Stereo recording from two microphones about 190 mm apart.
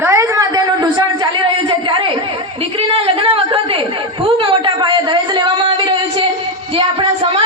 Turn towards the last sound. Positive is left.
turn(degrees=-30)  # may be behind; listen again after turning